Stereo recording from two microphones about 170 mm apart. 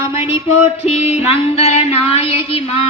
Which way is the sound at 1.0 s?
35° left (ahead or behind).